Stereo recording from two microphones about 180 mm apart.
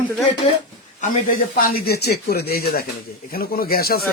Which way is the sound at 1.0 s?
50° left (ahead or behind).